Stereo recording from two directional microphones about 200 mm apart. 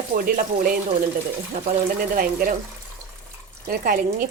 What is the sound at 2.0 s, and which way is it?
Speech, 45° right (ahead or behind).